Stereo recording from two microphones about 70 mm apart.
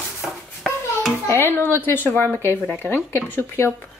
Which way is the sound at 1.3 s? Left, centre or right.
Left.